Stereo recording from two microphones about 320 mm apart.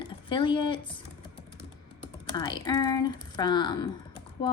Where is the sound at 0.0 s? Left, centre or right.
Centre.